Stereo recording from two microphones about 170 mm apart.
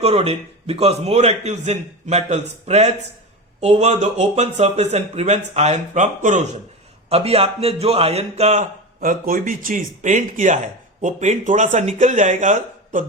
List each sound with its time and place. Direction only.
0.0 s speech: 35° right (ahead or behind)
9.0 s speech: 55° right (ahead or behind)